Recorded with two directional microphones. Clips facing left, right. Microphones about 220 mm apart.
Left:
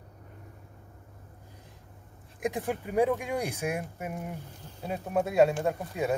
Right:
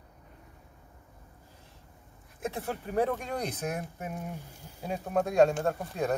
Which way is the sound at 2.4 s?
15° left (ahead or behind).